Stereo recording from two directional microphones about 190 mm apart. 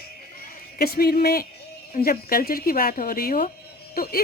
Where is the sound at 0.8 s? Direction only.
55° left (ahead or behind).